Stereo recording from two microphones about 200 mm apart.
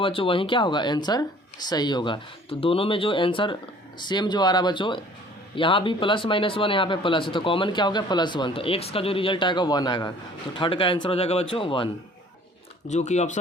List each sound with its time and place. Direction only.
0.0 s speech: 25° left (ahead or behind)
12.9 s speech: 35° left (ahead or behind)